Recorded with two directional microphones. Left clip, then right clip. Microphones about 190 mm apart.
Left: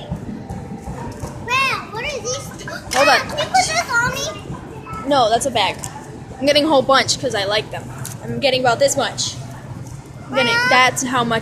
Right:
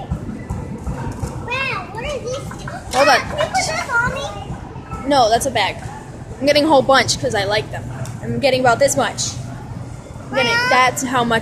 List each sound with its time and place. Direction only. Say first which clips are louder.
1.5 s children playing: left 4 dB; 55° left (ahead or behind)
3.0 s children playing: right 1 dB; centre (ahead or behind)
5.0 s speech: right 1 dB; 5° right (ahead or behind)
5.5 s speech: even; 10° left (ahead or behind); by 9.3 s 5° right (ahead or behind)
10.3 s speech: even; 10° left (ahead or behind)